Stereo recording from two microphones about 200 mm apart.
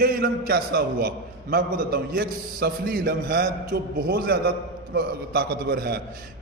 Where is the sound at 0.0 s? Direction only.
50° right (ahead or behind).